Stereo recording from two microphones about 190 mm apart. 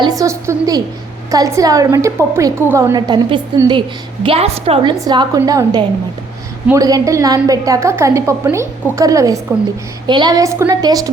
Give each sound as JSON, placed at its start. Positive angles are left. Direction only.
{"t": 0.0, "sound": "a woman's voice", "side_deg": -20}